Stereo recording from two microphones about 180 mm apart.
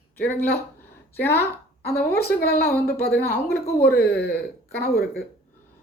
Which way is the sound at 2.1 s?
60° left (ahead or behind).